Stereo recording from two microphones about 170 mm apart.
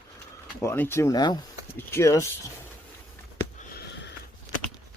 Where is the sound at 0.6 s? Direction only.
15° left (ahead or behind).